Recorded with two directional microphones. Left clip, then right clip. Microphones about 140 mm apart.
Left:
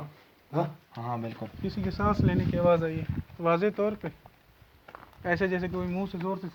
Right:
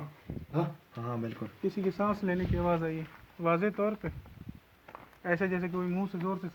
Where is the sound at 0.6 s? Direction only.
40° left (ahead or behind).